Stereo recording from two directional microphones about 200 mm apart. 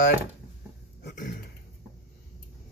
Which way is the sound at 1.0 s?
40° left (ahead or behind).